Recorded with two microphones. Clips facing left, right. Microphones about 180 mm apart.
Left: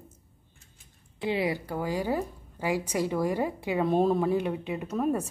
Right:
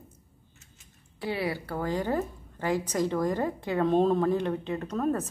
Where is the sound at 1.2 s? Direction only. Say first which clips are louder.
Left 3 dB; 20° left (ahead or behind).